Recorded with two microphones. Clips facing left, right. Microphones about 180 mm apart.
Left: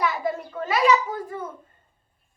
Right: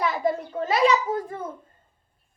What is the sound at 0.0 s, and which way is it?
Speech, 35° right (ahead or behind).